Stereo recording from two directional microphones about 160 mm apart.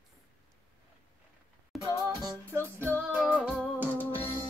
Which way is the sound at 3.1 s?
Centre (ahead or behind).